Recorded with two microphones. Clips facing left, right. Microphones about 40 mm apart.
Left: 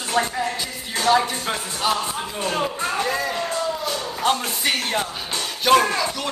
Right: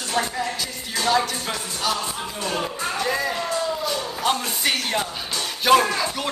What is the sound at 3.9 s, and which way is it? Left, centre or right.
Speech, centre.